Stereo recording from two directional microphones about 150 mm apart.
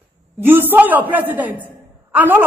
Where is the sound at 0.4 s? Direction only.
15° right (ahead or behind).